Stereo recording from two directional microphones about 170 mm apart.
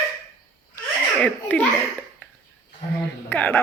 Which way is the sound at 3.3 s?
10° left (ahead or behind).